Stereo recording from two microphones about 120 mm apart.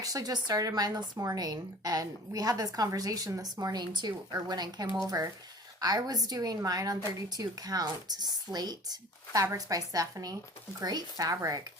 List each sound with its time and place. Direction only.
0.0 s speech: 30° right (ahead or behind)